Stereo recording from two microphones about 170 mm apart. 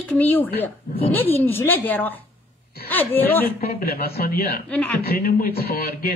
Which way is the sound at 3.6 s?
65° left (ahead or behind).